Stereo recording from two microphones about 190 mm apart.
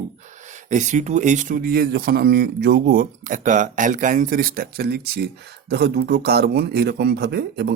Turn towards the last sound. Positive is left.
turn(degrees=-60)  # may be behind; listen again after turning